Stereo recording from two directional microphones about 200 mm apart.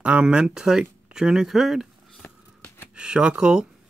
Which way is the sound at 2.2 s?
10° left (ahead or behind).